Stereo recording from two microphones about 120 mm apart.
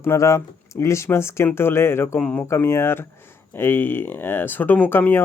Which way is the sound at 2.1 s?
10° left (ahead or behind).